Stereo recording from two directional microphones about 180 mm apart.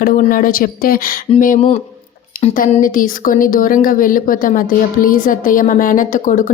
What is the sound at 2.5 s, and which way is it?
A woman's voice, 50° left (ahead or behind).